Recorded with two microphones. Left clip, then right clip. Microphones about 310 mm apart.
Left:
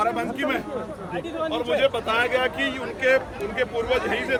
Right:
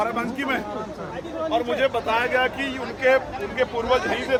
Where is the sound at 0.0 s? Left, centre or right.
Centre.